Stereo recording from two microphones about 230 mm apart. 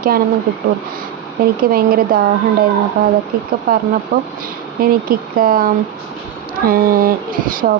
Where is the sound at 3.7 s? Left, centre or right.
Right.